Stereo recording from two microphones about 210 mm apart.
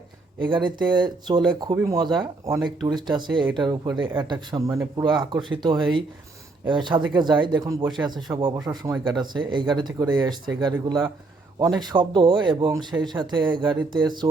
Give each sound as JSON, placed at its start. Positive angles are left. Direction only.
{"t": 0.3, "sound": "speech", "side_deg": -20}